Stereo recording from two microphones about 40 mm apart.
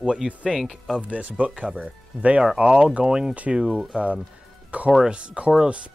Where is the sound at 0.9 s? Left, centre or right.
Right.